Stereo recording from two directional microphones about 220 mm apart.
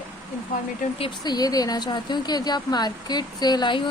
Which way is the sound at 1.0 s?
20° left (ahead or behind).